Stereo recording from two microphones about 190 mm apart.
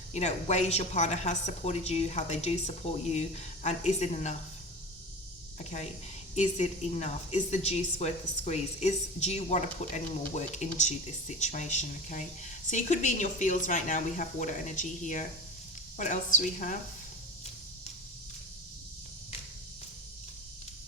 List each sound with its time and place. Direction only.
0.1 s speech: 35° left (ahead or behind)
5.5 s speech: 35° left (ahead or behind)